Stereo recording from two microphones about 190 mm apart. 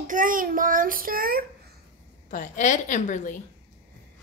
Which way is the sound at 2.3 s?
40° left (ahead or behind).